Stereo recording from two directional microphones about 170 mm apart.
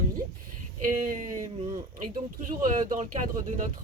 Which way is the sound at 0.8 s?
50° right (ahead or behind).